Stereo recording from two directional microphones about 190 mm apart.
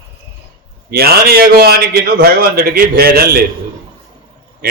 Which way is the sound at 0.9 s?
55° right (ahead or behind).